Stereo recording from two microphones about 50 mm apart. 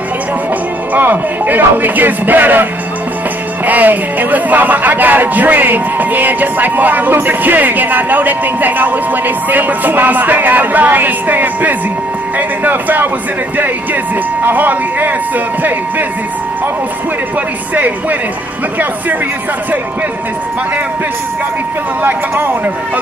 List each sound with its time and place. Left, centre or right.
0.9 s speech: right
14.4 s speech: right
22.0 s speech: right